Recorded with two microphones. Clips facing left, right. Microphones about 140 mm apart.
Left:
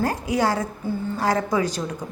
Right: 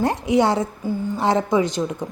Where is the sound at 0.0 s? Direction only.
20° right (ahead or behind).